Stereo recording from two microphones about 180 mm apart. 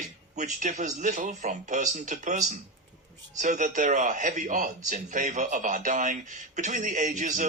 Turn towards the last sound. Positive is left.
turn(degrees=-40)  # may be behind; listen again after turning